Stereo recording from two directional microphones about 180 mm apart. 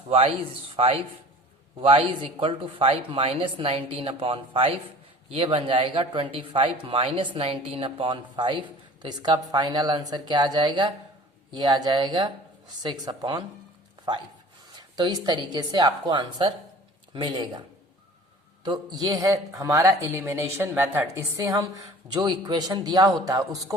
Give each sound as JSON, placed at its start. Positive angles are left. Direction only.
{"t": 0.1, "sound": "speech", "side_deg": -35}
{"t": 14.9, "sound": "speech", "side_deg": -25}
{"t": 18.6, "sound": "speech", "side_deg": -25}